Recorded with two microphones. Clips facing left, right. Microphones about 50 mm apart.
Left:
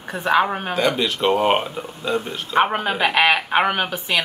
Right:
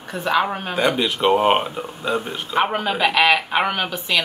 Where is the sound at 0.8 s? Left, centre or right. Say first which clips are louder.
Right 1 dB; centre.